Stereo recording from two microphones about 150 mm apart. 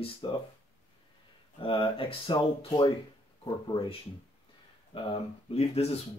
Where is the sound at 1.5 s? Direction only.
35° left (ahead or behind).